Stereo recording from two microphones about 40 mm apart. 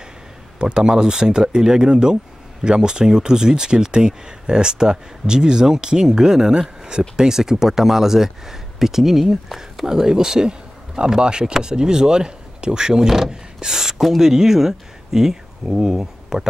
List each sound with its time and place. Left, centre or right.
0.6 s speech: right; by 9.8 s centre
9.8 s speech: centre
13.6 s a sound: centre
14.2 s speech: centre